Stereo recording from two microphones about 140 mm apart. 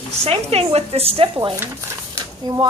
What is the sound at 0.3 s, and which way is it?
A woman's voice, 45° right (ahead or behind).